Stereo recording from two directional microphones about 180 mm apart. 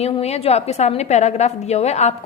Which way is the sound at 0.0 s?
35° left (ahead or behind).